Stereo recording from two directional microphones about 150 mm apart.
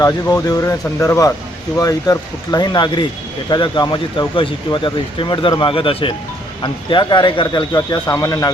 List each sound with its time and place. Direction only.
0.0 s speech: 25° left (ahead or behind)